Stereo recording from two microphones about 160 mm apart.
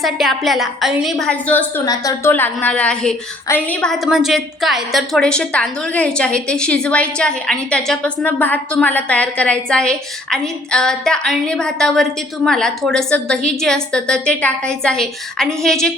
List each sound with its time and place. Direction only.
0.0 s a woman's voice: centre (ahead or behind)
1.8 s a woman's voice: 20° left (ahead or behind); by 15.9 s 5° left (ahead or behind)